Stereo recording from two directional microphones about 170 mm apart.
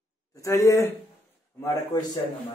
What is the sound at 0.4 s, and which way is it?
Speech, 20° left (ahead or behind).